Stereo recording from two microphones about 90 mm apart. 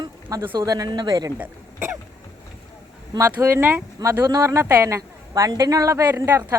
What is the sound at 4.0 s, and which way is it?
Speech, 45° right (ahead or behind).